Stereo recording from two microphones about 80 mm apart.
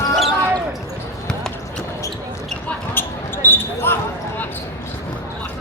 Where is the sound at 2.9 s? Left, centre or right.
Left.